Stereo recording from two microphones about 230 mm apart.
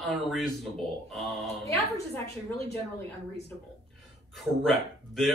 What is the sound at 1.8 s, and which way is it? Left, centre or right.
Speech, left.